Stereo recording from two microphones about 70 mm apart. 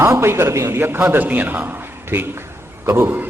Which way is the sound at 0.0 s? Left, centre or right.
Right.